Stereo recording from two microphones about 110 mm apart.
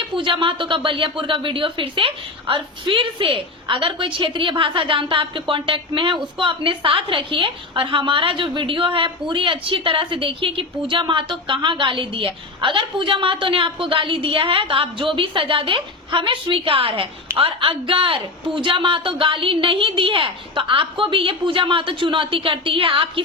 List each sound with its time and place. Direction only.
0.2 s a woman's voice: 50° right (ahead or behind)